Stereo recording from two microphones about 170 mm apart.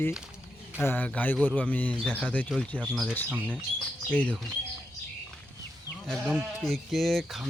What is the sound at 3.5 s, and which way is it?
Speech, 10° left (ahead or behind).